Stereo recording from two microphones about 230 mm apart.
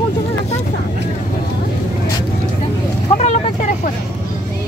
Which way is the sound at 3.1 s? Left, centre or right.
Left.